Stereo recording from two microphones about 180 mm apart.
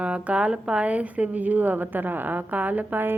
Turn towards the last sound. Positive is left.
turn(degrees=-10)  # may be behind; listen again after turning